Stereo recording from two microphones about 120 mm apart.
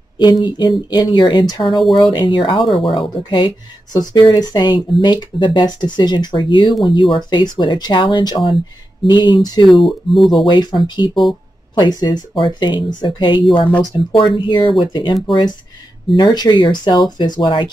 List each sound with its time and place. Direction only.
0.2 s speech: 35° left (ahead or behind)
1.8 s speech: centre (ahead or behind)
2.1 s speech: 40° left (ahead or behind)
9.7 s speech: centre (ahead or behind)
10.4 s speech: 40° left (ahead or behind)
11.8 s speech: 40° left (ahead or behind)